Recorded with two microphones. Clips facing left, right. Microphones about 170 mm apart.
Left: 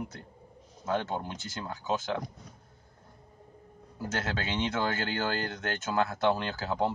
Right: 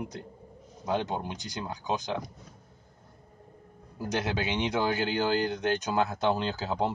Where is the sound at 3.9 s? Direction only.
15° right (ahead or behind).